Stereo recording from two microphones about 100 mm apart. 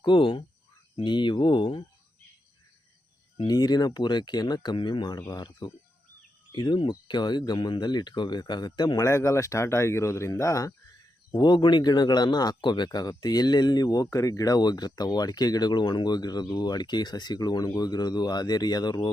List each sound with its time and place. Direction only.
0.0 s a man's voice: 55° left (ahead or behind)
3.4 s a man's voice: 40° left (ahead or behind)
9.0 s speech: 30° left (ahead or behind)
11.3 s a man's voice: 50° left (ahead or behind)